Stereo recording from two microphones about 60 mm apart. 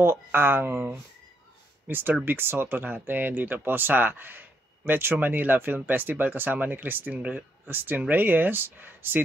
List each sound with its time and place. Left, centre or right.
0.0 s speech: right